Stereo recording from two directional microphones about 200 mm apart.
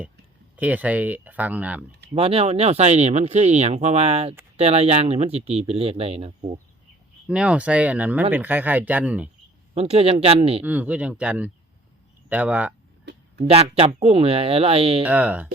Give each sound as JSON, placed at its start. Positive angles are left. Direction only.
{"t": 0.5, "sound": "speech", "side_deg": -10}
{"t": 2.1, "sound": "speech", "side_deg": -30}
{"t": 7.3, "sound": "speech", "side_deg": -5}
{"t": 9.7, "sound": "speech", "side_deg": -30}
{"t": 10.6, "sound": "speech", "side_deg": -5}
{"t": 13.1, "sound": "a sound", "side_deg": -55}
{"t": 13.5, "sound": "speech", "side_deg": -30}
{"t": 15.0, "sound": "speech", "side_deg": -10}